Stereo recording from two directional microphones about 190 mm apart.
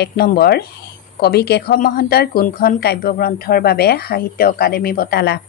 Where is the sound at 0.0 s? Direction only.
55° left (ahead or behind).